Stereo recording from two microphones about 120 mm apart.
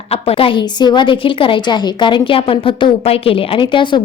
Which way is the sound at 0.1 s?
55° left (ahead or behind).